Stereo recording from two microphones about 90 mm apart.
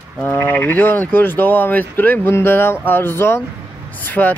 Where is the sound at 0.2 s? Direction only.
20° left (ahead or behind).